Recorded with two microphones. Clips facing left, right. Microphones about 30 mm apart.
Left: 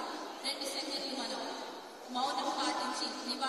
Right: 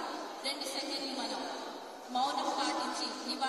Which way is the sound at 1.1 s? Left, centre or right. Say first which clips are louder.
Right 1 dB; right.